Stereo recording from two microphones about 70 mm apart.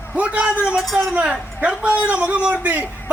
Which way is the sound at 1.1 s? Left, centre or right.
Centre.